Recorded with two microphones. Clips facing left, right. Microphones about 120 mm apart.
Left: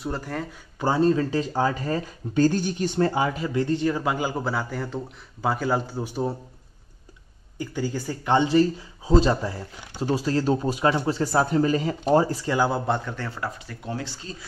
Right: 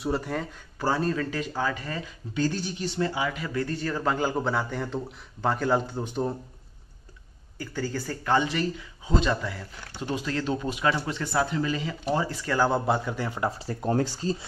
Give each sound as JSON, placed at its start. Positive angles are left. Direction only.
{"t": 0.0, "sound": "a man's voice", "side_deg": 0}
{"t": 0.7, "sound": "speech", "side_deg": 20}
{"t": 3.3, "sound": "a man's voice", "side_deg": 25}
{"t": 7.5, "sound": "speech", "side_deg": 15}
{"t": 12.4, "sound": "a man's voice", "side_deg": 15}
{"t": 12.7, "sound": "a man's voice", "side_deg": -5}
{"t": 13.7, "sound": "speech", "side_deg": -40}